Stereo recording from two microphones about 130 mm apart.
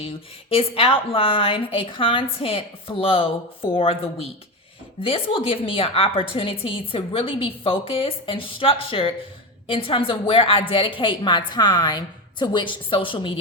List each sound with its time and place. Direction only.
0.5 s a woman's voice: 45° left (ahead or behind)